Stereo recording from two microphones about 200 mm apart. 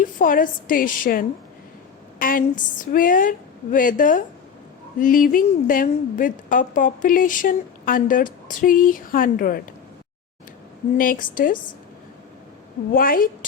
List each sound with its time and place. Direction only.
0.0 s a woman's voice: 40° left (ahead or behind)
10.9 s a woman's voice: 45° left (ahead or behind)
12.9 s a woman's voice: 45° left (ahead or behind)